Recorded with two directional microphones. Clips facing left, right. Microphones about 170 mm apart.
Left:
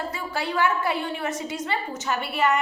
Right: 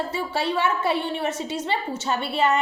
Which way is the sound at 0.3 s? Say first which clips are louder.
Even; 25° right (ahead or behind).